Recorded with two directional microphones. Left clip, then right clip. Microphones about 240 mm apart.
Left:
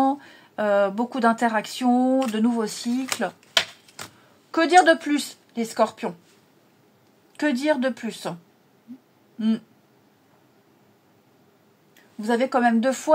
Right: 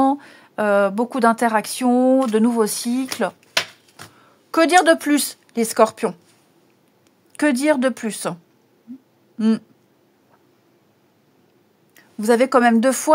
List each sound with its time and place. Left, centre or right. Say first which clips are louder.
0.0 s speech: right 4 dB; right
4.5 s speech: right 2 dB; right
7.3 s speech: right 5 dB; right
11.9 s speech: right 7 dB; right